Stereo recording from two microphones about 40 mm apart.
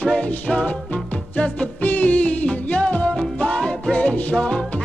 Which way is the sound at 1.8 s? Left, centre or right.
Left.